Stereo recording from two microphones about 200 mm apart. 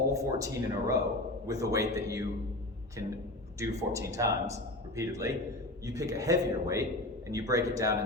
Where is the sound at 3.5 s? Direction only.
15° right (ahead or behind).